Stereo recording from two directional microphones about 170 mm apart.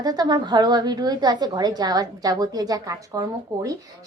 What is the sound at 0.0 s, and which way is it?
A woman's voice, 20° right (ahead or behind).